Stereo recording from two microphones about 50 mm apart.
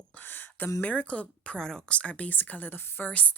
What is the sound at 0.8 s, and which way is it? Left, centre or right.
Speech, left.